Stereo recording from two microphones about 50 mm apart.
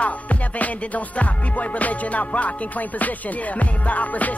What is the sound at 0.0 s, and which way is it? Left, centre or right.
Music, left.